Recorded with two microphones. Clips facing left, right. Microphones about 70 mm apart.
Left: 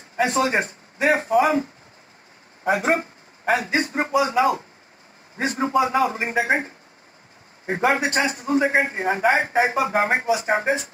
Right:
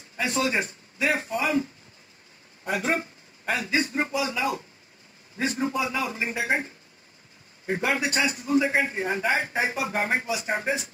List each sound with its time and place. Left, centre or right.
0.2 s a man's voice: left
2.6 s a man's voice: left